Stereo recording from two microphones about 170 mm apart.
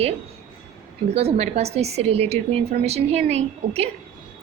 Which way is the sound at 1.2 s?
40° right (ahead or behind).